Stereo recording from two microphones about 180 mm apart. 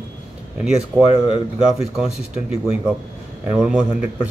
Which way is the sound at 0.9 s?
20° right (ahead or behind).